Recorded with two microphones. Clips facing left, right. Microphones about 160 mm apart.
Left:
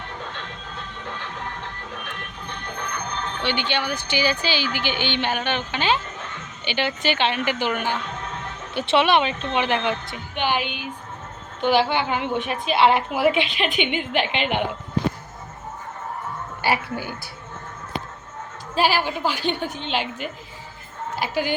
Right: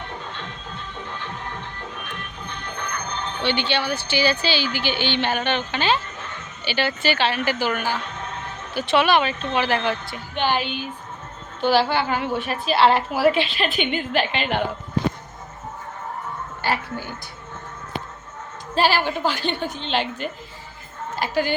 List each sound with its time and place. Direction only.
3.4 s a woman's voice: 15° left (ahead or behind)
16.6 s a woman's voice: 10° left (ahead or behind)
18.7 s a woman's voice: 10° left (ahead or behind)